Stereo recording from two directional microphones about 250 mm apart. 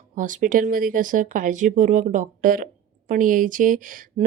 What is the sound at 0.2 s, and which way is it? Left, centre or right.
Speech, right.